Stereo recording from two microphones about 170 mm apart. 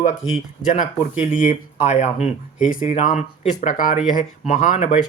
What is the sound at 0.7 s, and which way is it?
Speech, 50° left (ahead or behind).